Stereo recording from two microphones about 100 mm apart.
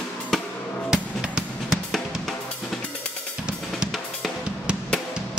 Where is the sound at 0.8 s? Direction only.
5° right (ahead or behind).